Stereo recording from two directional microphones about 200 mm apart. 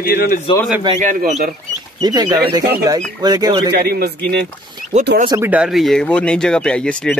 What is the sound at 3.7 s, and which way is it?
Speech, 55° right (ahead or behind).